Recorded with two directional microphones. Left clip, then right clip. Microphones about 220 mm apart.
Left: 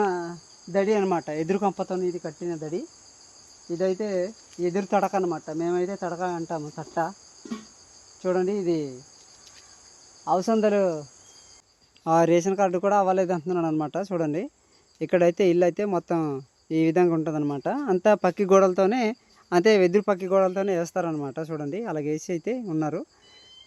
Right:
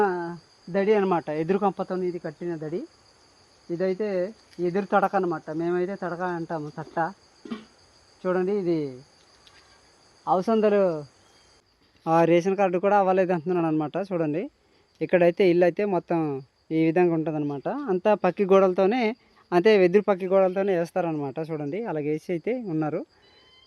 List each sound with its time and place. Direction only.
0.0 s cricket: 15° right (ahead or behind)
3.7 s speech: 15° right (ahead or behind)
10.2 s speech: 15° right (ahead or behind)
12.0 s speech: centre (ahead or behind)